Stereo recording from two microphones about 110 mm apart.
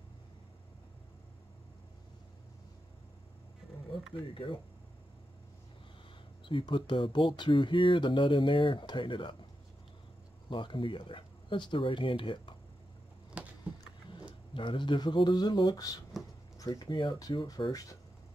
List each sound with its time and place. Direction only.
4.3 s speech: 50° left (ahead or behind)
6.4 s speech: 50° left (ahead or behind)
10.5 s speech: 50° left (ahead or behind)
13.4 s a sound: 10° right (ahead or behind)
14.5 s speech: 50° left (ahead or behind)